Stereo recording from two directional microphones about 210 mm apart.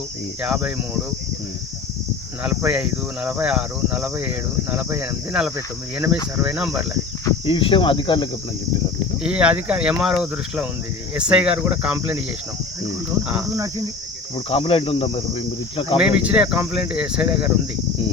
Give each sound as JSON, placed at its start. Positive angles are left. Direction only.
{"t": 0.4, "sound": "speech", "side_deg": -5}
{"t": 2.4, "sound": "speech", "side_deg": -5}
{"t": 7.3, "sound": "speech", "side_deg": 25}
{"t": 9.2, "sound": "speech", "side_deg": -5}
{"t": 13.2, "sound": "speech", "side_deg": -10}
{"t": 14.3, "sound": "speech", "side_deg": 25}
{"t": 16.0, "sound": "speech", "side_deg": -5}